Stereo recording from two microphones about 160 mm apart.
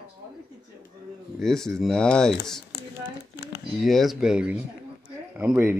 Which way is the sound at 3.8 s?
Centre (ahead or behind).